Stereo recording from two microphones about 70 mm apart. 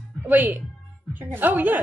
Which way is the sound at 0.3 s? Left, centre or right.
Right.